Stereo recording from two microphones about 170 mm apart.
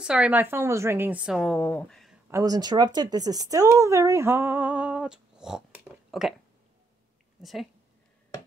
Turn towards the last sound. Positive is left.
turn(degrees=0)  # may be behind; listen again after turning